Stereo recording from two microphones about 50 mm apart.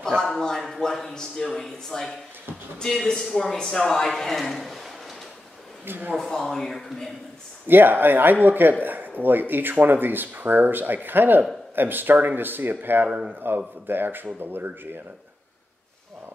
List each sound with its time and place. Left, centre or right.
0.0 s a sound: centre
0.6 s speech: centre
5.9 s speech: right
6.1 s speech: centre
7.6 s speech: right